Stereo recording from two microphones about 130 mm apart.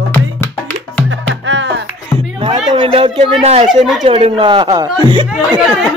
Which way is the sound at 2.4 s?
45° right (ahead or behind).